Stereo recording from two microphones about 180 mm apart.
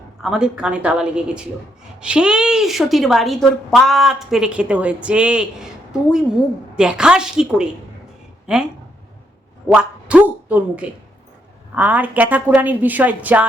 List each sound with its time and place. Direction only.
0.2 s a woman's voice: 5° right (ahead or behind)
9.6 s a woman's voice: 10° right (ahead or behind)